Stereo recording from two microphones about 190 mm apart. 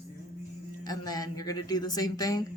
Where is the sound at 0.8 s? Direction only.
20° left (ahead or behind).